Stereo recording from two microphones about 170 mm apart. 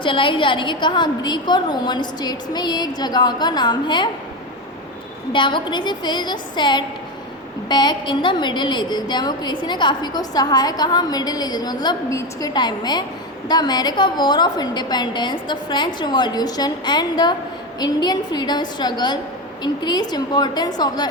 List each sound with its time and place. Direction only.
0.0 s a woman's voice: 30° left (ahead or behind)
5.3 s a woman's voice: 30° left (ahead or behind)